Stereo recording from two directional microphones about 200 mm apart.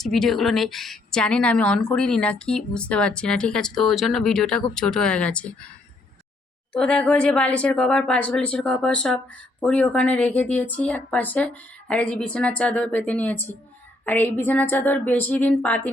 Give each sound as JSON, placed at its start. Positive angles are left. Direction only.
{"t": 0.0, "sound": "a woman's voice", "side_deg": 0}
{"t": 6.7, "sound": "a woman's voice", "side_deg": 5}